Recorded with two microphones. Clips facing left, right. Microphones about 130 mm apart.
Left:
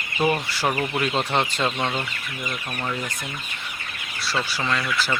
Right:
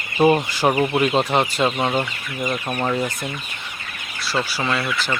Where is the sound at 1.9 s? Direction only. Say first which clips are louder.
Right 6 dB; 40° right (ahead or behind).